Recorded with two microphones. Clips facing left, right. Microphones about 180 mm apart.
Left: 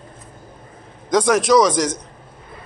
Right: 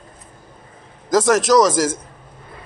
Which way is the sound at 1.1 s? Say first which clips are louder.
Even; centre (ahead or behind).